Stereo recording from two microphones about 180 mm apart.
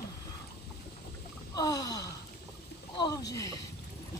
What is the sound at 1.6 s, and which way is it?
Speech, 20° left (ahead or behind).